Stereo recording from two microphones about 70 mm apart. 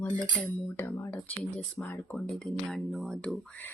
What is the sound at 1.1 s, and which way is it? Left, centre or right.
Speech, left.